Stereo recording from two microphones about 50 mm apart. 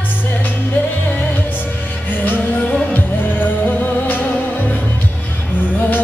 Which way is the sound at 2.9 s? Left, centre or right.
Left.